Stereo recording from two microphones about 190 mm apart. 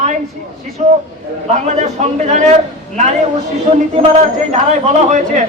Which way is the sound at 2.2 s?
40° right (ahead or behind).